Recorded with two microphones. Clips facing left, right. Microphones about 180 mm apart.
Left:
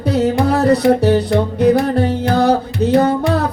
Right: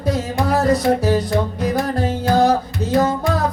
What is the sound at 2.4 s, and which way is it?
Music, 65° left (ahead or behind).